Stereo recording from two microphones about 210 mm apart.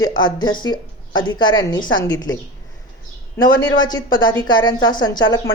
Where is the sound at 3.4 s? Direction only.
20° left (ahead or behind).